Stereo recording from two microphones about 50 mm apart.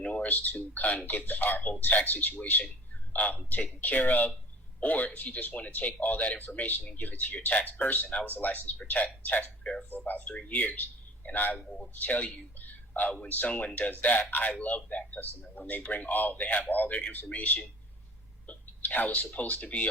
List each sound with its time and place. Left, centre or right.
0.0 s a man's voice: left
10.1 s speech: left